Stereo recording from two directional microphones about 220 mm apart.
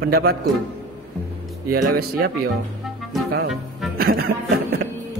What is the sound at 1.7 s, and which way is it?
Speech, 45° right (ahead or behind).